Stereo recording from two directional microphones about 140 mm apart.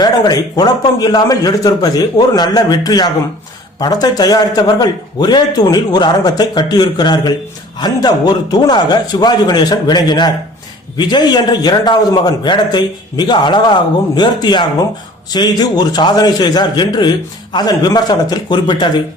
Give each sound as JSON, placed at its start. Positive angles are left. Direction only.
{"t": 0.0, "sound": "a man's voice", "side_deg": 30}